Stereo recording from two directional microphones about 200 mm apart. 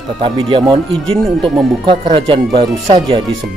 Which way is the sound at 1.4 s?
Centre (ahead or behind).